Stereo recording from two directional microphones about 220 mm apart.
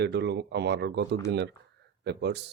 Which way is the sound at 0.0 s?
50° right (ahead or behind).